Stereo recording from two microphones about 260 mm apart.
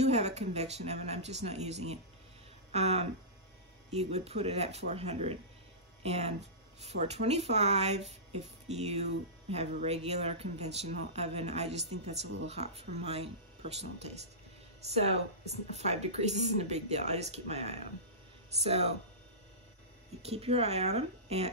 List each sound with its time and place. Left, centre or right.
0.0 s speech: right
15.7 s speech: right
20.2 s speech: right